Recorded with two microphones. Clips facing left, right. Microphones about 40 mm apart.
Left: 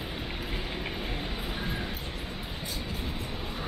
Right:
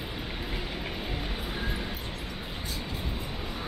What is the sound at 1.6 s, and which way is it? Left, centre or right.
Music, centre.